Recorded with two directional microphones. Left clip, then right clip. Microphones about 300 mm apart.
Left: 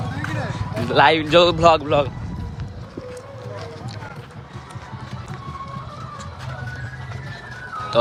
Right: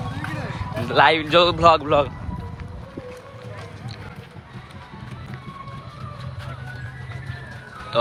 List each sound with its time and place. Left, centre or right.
0.2 s speech: centre